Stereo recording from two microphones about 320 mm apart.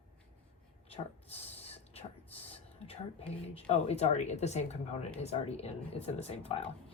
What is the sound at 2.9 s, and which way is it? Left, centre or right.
Speech, centre.